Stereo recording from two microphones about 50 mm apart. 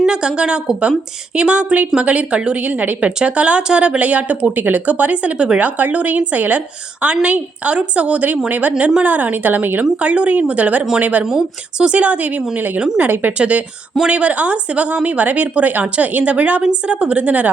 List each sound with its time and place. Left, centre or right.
0.0 s speech: centre; by 9.8 s right
10.0 s speech: right
11.3 s speech: centre
11.9 s speech: right